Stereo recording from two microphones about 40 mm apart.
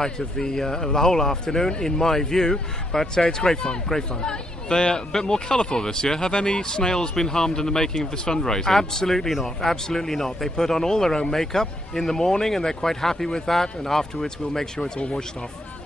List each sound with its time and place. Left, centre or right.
0.0 s speech: centre
15.0 s speech: left